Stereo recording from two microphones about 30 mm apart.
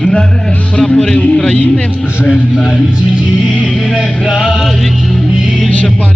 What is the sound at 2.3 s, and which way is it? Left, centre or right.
Speech, centre.